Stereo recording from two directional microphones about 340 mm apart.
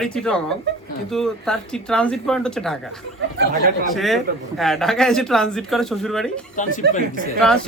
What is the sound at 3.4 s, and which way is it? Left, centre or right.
Speech, right.